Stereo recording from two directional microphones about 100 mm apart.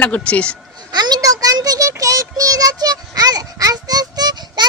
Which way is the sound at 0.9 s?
45° right (ahead or behind).